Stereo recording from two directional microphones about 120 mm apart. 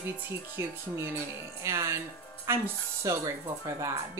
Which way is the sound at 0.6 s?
20° right (ahead or behind).